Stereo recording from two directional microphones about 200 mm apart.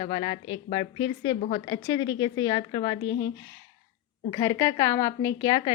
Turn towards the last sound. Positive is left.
turn(degrees=20)  # may be behind; listen again after turning